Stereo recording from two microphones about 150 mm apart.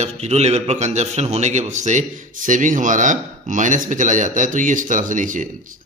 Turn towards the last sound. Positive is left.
turn(degrees=-60)  # may be behind; listen again after turning